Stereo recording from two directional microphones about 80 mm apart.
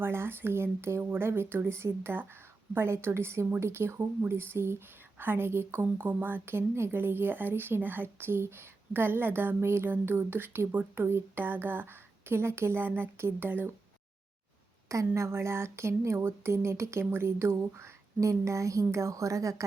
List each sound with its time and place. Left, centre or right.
0.0 s speech: right
14.8 s speech: right